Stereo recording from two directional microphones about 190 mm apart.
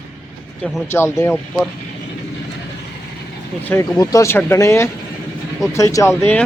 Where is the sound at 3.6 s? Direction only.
15° left (ahead or behind).